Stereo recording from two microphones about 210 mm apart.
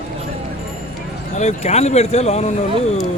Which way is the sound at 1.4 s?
30° left (ahead or behind).